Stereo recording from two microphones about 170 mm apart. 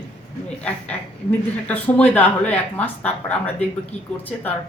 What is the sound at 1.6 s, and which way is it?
A woman's voice, 10° left (ahead or behind).